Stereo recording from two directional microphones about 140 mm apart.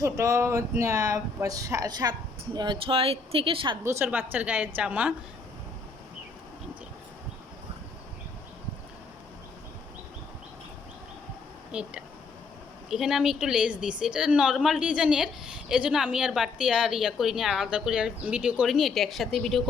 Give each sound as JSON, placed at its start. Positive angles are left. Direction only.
{"t": 0.0, "sound": "speech", "side_deg": -20}
{"t": 2.6, "sound": "speech", "side_deg": -35}
{"t": 3.8, "sound": "a woman's voice", "side_deg": -15}
{"t": 11.7, "sound": "a woman's voice", "side_deg": -5}